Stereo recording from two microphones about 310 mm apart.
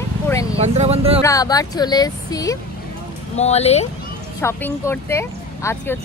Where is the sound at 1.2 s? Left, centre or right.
Centre.